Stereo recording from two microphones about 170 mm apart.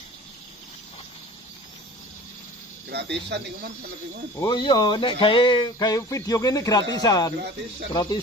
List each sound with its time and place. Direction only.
2.9 s speech: 80° right
4.4 s speech: 25° left (ahead or behind)